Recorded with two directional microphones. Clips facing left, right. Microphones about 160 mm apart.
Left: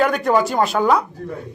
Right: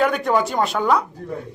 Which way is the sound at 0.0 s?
Centre (ahead or behind).